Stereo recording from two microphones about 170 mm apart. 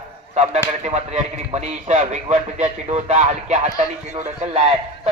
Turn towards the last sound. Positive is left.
turn(degrees=-35)  # may be behind; listen again after turning